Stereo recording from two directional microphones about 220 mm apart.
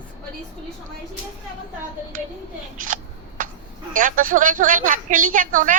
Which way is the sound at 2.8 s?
35° right (ahead or behind).